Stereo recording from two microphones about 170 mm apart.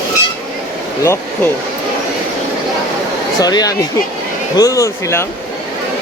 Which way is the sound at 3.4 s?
20° left (ahead or behind).